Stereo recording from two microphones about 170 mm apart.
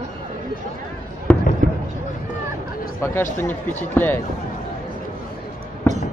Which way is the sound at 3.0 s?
15° left (ahead or behind).